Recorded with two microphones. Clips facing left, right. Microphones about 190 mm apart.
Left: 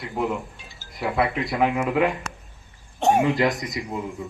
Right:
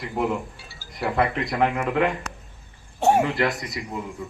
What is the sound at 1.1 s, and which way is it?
Speech, centre (ahead or behind).